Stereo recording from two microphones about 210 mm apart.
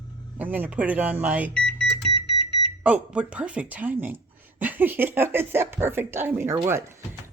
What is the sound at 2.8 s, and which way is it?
Speech, 5° right (ahead or behind).